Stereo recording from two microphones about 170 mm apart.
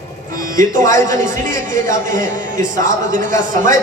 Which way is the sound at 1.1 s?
50° right (ahead or behind).